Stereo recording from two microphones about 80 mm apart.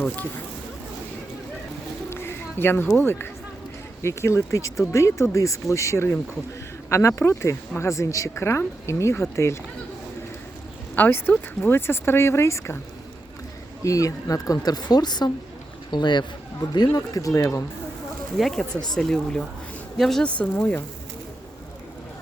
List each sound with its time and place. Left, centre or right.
2.0 s a sound: left
3.0 s speech: left
10.9 s speech: left
13.8 s a man's voice: left
18.3 s speech: centre